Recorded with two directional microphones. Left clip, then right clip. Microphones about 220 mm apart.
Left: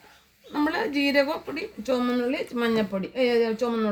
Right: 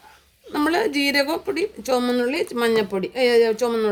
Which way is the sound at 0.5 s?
55° right (ahead or behind).